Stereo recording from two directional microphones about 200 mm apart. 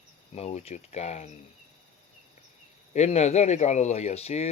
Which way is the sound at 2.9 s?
35° left (ahead or behind).